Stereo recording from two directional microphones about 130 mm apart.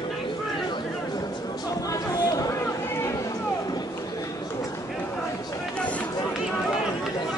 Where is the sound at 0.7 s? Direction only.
30° left (ahead or behind).